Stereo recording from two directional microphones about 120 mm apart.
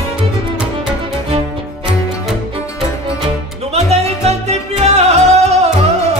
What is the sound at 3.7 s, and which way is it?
Music, 60° right (ahead or behind).